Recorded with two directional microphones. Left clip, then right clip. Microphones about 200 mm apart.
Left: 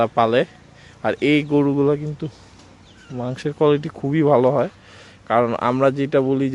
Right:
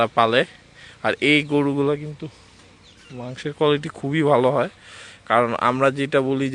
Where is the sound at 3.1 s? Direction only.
15° left (ahead or behind).